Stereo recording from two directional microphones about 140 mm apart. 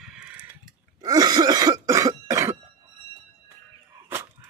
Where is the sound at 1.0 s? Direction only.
30° right (ahead or behind).